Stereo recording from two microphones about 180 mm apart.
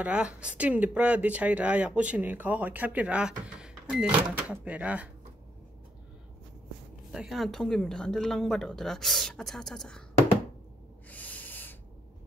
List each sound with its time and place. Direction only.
0.0 s speech: 5° right (ahead or behind)
7.1 s a woman's voice: 5° right (ahead or behind)
11.1 s owl: 10° left (ahead or behind)